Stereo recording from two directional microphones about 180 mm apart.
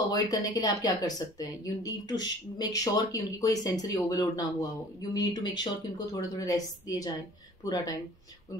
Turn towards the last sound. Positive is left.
turn(degrees=20)  # may be behind; listen again after turning